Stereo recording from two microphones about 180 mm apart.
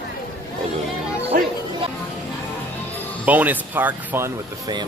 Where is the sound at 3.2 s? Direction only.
10° right (ahead or behind).